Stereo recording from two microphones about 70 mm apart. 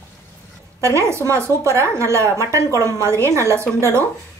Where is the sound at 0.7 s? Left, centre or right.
Right.